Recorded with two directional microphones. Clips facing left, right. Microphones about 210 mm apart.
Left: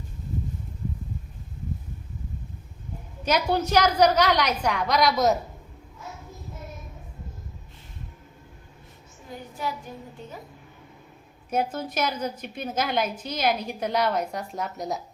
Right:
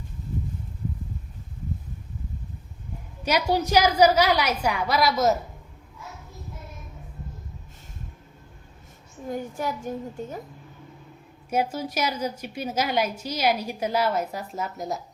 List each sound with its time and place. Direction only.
3.2 s a woman's voice: 10° right (ahead or behind)
9.3 s a woman's voice: 45° right (ahead or behind)
11.5 s a woman's voice: 10° right (ahead or behind)